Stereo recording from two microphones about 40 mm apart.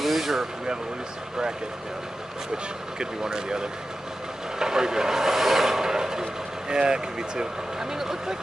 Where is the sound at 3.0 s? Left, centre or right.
Centre.